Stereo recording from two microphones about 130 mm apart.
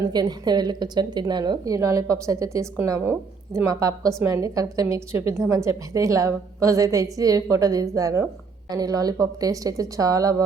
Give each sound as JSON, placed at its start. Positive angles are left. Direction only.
{"t": 0.1, "sound": "speech", "side_deg": -30}